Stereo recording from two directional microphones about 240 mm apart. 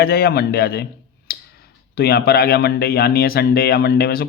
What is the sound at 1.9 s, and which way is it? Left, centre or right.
Speech, left.